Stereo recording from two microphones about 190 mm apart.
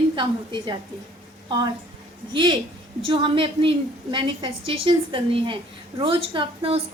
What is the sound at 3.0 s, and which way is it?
Speech, 25° right (ahead or behind).